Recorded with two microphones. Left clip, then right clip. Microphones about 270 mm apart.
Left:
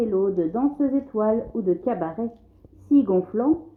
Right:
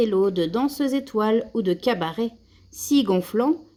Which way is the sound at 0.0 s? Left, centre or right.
Right.